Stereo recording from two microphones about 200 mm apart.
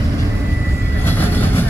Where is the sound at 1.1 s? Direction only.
10° left (ahead or behind).